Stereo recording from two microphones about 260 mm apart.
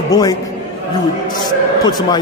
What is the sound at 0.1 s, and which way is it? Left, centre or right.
A man's voice, centre.